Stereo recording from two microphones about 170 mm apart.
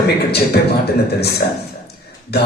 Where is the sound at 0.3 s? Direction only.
70° left (ahead or behind).